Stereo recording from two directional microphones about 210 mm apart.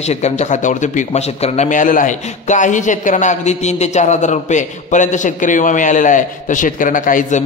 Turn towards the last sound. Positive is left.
turn(degrees=40)  # may be behind; listen again after turning